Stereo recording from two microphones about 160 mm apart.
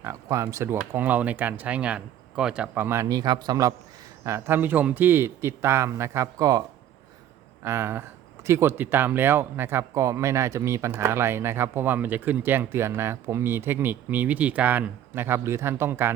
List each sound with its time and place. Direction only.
0.0 s speech: 20° right (ahead or behind)
7.6 s speech: 15° right (ahead or behind)